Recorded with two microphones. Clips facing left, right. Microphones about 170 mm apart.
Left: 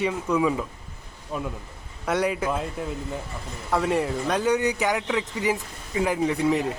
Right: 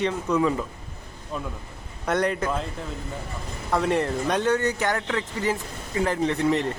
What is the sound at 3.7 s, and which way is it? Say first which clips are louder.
Speech: even; centre (ahead or behind).